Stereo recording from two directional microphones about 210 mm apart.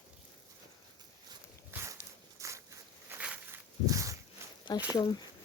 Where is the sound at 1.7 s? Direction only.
10° right (ahead or behind).